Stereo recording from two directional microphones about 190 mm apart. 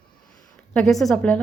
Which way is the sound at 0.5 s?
5° left (ahead or behind).